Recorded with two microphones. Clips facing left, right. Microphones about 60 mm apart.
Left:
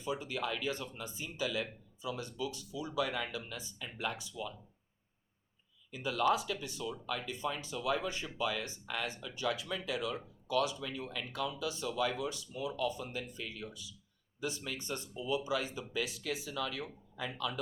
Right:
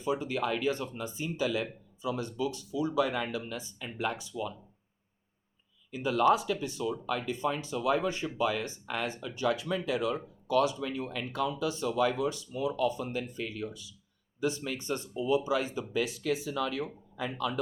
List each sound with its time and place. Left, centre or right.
0.0 s speech: right
5.9 s speech: right